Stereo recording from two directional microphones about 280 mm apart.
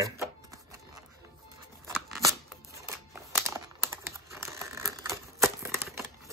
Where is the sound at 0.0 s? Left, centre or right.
Centre.